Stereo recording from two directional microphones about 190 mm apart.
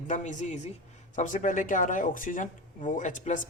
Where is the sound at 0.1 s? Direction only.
40° left (ahead or behind).